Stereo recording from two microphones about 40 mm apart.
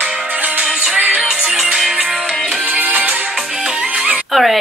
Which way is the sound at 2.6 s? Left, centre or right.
Right.